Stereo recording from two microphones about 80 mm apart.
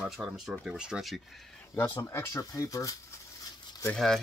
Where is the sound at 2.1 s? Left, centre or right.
Left.